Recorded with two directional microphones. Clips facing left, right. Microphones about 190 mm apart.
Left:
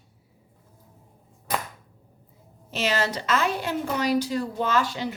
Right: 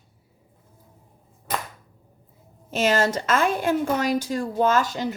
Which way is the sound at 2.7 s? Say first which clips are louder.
Right 5 dB; 45° right (ahead or behind).